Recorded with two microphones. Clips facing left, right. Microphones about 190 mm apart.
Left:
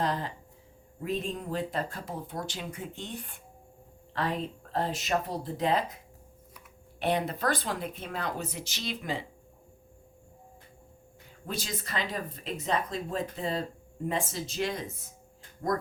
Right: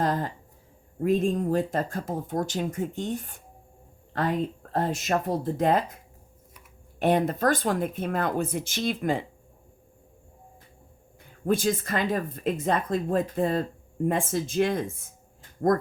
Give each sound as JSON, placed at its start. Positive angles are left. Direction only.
{"t": 0.0, "sound": "speech", "side_deg": -45}
{"t": 4.7, "sound": "speech", "side_deg": -45}
{"t": 7.0, "sound": "speech", "side_deg": -50}
{"t": 11.3, "sound": "speech", "side_deg": -50}